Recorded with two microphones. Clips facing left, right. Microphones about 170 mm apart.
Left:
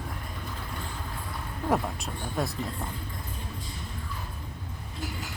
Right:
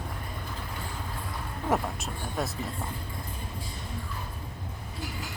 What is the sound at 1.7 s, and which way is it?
Speech, centre (ahead or behind).